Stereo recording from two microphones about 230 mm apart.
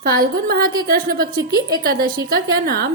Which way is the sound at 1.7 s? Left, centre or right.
Right.